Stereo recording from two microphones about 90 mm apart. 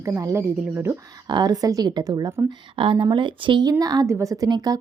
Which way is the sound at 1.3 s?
50° right (ahead or behind).